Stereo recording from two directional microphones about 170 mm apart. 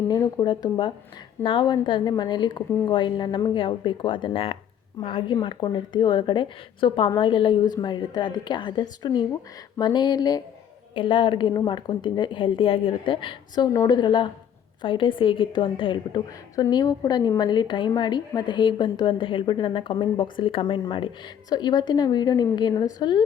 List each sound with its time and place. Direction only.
0.1 s a woman's voice: 25° left (ahead or behind)